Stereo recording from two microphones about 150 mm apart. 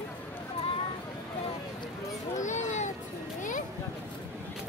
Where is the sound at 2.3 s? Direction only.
55° left (ahead or behind).